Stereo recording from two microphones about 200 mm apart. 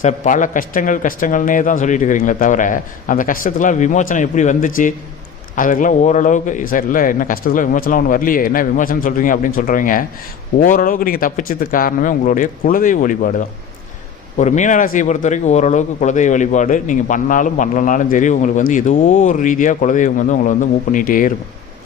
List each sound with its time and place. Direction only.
0.0 s a man's voice: 40° left (ahead or behind)
14.3 s a man's voice: 35° left (ahead or behind)